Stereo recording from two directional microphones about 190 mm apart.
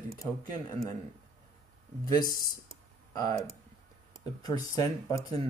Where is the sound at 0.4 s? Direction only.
20° left (ahead or behind).